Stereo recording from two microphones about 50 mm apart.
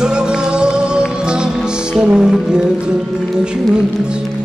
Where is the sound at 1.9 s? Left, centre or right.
Centre.